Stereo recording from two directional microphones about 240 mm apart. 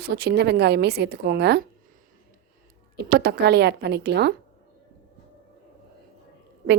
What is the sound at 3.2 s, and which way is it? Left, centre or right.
A woman's voice, right.